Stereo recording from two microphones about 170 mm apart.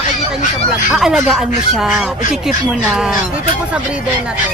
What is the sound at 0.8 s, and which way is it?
Speech, centre (ahead or behind).